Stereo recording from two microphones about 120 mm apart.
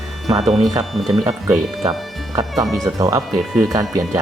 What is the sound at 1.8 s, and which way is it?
Speech, 35° right (ahead or behind).